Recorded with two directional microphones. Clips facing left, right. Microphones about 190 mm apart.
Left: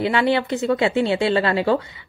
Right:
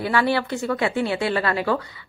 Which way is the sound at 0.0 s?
20° left (ahead or behind).